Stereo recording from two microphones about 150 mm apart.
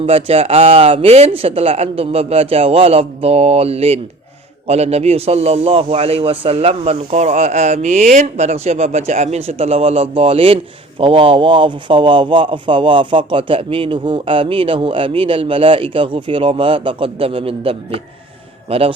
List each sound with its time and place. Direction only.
0.0 s a man's voice: 40° right (ahead or behind)